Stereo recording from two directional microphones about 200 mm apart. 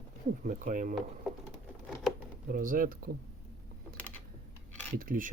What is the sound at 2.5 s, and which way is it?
Speech, 45° right (ahead or behind).